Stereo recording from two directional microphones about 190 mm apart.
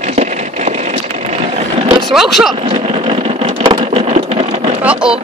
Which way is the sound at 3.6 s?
25° right (ahead or behind).